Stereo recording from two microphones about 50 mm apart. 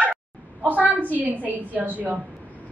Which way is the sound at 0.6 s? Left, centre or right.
Right.